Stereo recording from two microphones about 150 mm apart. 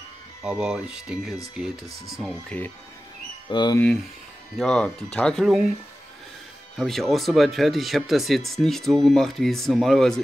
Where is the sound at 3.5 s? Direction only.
30° left (ahead or behind).